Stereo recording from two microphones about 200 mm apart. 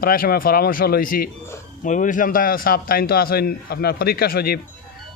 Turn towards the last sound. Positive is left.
turn(degrees=50)  # may be behind; listen again after turning